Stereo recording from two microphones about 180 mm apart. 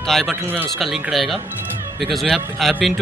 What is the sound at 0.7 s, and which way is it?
Speech, centre (ahead or behind).